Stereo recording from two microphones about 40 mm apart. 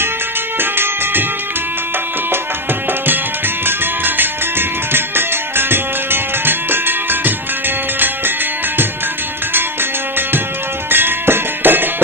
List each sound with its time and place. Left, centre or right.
0.6 s music: right
3.6 s music: right
10.9 s music: right